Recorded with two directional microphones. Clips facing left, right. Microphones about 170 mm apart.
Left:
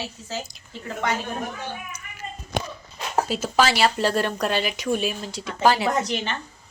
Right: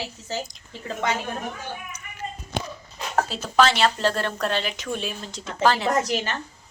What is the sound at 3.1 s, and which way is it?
Speech, 10° left (ahead or behind).